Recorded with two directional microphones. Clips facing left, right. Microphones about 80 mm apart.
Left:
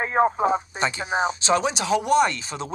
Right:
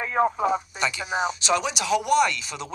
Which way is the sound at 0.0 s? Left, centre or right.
Left.